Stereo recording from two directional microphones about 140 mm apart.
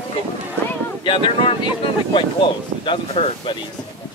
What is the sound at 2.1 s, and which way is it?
Speech, 35° left (ahead or behind).